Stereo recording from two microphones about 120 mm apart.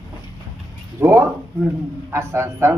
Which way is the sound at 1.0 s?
20° right (ahead or behind).